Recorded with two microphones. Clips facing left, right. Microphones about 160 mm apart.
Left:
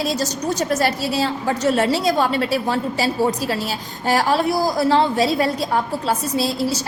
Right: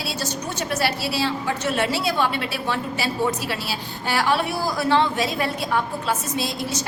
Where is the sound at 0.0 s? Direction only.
40° left (ahead or behind).